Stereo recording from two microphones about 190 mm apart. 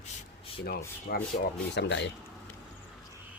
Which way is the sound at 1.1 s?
55° left (ahead or behind).